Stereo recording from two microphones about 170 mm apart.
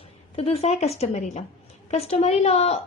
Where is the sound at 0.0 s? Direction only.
35° left (ahead or behind).